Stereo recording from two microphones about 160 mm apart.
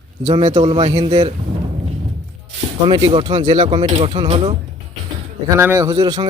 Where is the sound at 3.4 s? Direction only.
45° right (ahead or behind).